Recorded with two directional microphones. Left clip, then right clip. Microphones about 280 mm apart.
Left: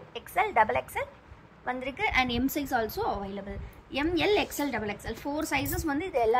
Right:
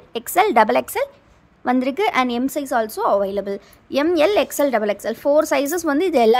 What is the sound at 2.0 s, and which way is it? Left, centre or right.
A woman's voice, centre.